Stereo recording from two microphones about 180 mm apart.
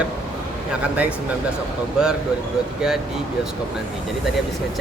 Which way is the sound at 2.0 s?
5° right (ahead or behind).